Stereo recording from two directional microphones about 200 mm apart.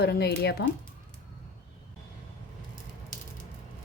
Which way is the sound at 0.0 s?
55° left (ahead or behind).